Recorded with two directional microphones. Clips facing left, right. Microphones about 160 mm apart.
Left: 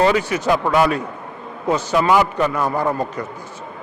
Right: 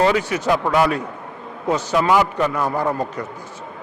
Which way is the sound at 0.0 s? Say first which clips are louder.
Left 1 dB; 15° left (ahead or behind).